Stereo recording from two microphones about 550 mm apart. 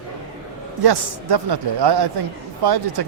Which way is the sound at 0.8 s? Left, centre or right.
Right.